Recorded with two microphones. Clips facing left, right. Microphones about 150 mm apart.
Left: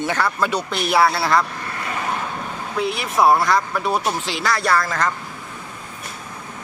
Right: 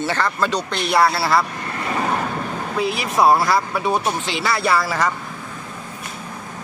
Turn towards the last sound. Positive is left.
turn(degrees=-10)  # may be behind; listen again after turning